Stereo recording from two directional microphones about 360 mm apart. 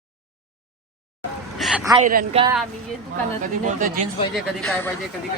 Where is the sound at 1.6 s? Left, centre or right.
Centre.